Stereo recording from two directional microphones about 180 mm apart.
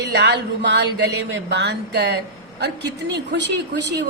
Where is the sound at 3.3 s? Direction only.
75° right (ahead or behind).